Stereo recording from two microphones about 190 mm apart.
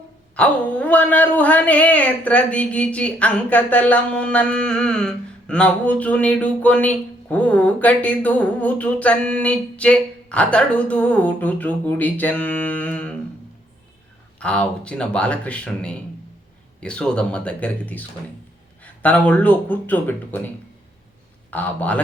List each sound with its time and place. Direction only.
0.3 s speech: 5° left (ahead or behind)
14.3 s speech: 5° left (ahead or behind)
21.5 s speech: 10° left (ahead or behind)